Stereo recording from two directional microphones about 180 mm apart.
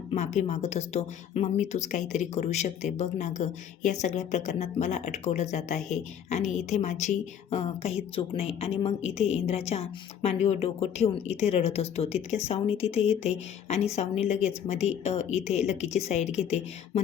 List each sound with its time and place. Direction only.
0.1 s speech: 40° left (ahead or behind)